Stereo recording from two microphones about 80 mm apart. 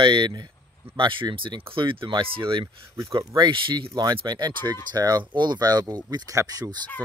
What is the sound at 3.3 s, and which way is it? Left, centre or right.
Speech, right.